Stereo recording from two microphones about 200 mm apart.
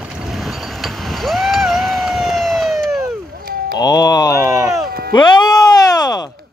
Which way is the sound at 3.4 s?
50° right (ahead or behind).